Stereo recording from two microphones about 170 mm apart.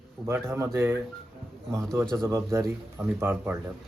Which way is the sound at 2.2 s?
15° right (ahead or behind).